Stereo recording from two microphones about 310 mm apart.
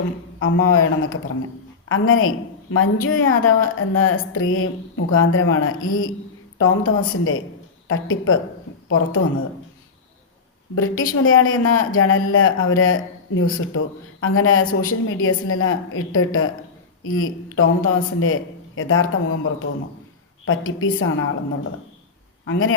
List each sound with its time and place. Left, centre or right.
0.4 s a man's voice: left
10.8 s a man's voice: left